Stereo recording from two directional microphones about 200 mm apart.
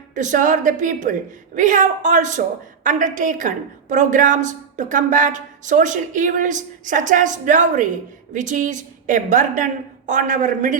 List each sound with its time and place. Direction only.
0.1 s a woman's voice: 40° right (ahead or behind)